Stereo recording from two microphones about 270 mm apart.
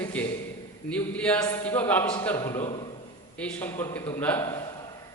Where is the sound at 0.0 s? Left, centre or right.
Centre.